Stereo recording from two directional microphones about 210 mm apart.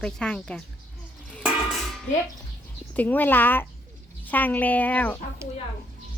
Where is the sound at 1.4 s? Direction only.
Centre (ahead or behind).